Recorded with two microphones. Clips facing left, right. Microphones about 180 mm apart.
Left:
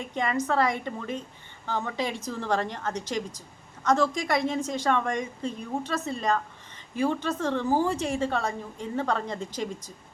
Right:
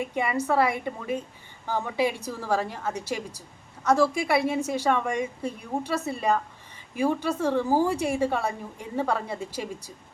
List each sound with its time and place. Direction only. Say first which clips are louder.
0.0 s a woman's voice: right 1 dB; 10° right (ahead or behind)